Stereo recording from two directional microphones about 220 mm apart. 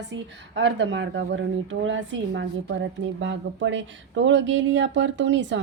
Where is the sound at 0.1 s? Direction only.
55° right (ahead or behind).